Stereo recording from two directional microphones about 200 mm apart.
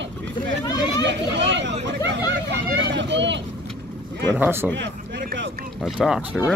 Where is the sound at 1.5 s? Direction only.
60° right (ahead or behind).